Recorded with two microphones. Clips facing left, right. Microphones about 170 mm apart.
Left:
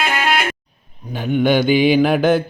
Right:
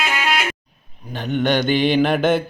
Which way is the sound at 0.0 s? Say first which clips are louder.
Left 3 dB; 55° left (ahead or behind).